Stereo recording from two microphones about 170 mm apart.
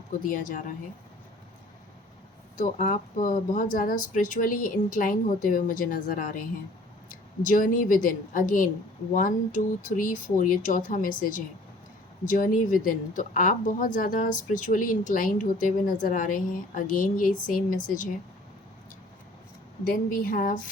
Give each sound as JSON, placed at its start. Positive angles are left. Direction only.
{"t": 0.3, "sound": "a woman's voice", "side_deg": 50}
{"t": 2.6, "sound": "a woman's voice", "side_deg": 45}
{"t": 19.8, "sound": "speech", "side_deg": 55}